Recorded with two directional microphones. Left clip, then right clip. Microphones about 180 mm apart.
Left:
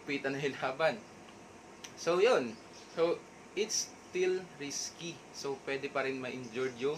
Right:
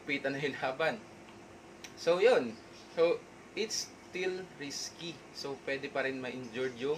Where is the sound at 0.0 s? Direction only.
10° left (ahead or behind).